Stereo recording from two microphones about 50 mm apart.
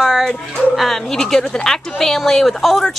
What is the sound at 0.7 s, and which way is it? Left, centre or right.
Speech, centre.